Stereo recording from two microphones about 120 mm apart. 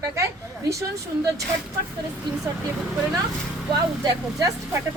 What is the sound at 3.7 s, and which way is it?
Speech, 35° right (ahead or behind).